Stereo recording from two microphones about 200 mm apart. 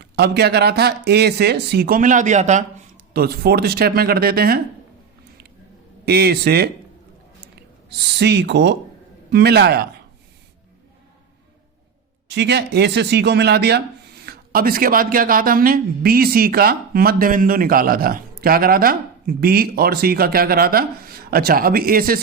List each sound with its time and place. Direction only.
0.0 s speech: 55° right (ahead or behind); by 2.6 s 35° right (ahead or behind)
3.1 s speech: 50° right (ahead or behind)
6.1 s speech: 50° right (ahead or behind)
12.3 s speech: 60° right (ahead or behind)